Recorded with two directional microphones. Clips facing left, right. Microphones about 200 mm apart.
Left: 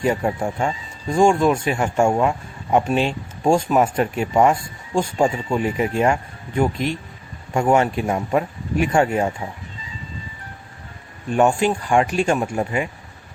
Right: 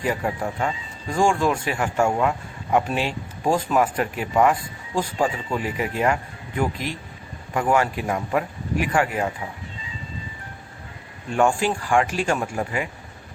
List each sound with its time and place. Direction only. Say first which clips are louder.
0.0 s speech: left 4 dB; 25° left (ahead or behind)
11.3 s speech: left 3 dB; 20° left (ahead or behind)